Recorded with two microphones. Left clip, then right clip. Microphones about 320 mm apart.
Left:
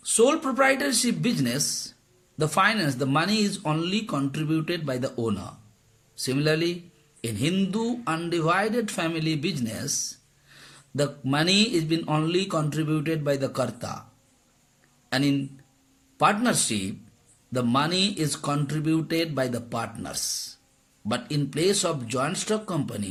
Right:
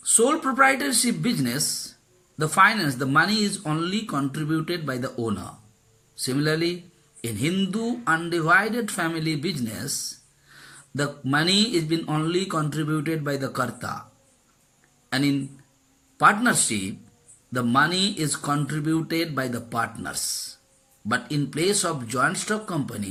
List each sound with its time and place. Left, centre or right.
0.0 s speech: centre
6.2 s speech: centre
15.1 s a man's voice: centre